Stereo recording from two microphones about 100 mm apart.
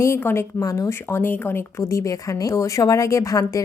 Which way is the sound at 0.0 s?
25° left (ahead or behind).